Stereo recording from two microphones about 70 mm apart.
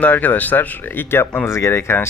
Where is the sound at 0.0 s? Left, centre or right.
Left.